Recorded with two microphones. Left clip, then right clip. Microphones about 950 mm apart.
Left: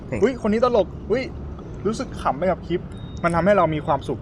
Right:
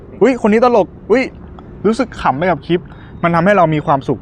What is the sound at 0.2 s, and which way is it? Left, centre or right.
Speech, right.